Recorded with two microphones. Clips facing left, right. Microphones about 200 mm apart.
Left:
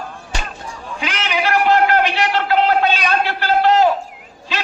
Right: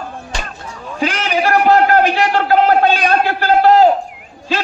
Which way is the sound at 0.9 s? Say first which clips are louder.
Right 5 dB; 40° right (ahead or behind).